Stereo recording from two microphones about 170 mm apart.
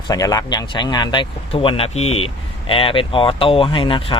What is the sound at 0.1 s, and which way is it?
Speech, 20° left (ahead or behind).